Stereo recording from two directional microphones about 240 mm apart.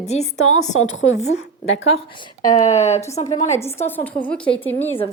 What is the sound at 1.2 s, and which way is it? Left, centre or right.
A woman's voice, left.